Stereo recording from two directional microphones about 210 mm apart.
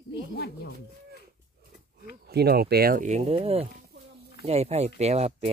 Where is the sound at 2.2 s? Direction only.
50° right (ahead or behind); by 3.6 s 30° right (ahead or behind).